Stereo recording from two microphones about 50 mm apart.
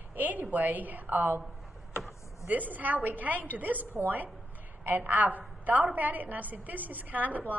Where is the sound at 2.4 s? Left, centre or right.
Right.